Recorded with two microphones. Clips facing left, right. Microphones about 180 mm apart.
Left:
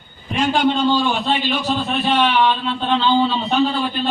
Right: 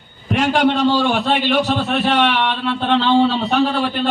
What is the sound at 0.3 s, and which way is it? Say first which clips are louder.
A man's voice: right 2 dB; 70° right (ahead or behind).